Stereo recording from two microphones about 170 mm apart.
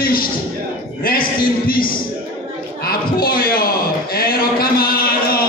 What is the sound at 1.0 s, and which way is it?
Speech, 60° left (ahead or behind).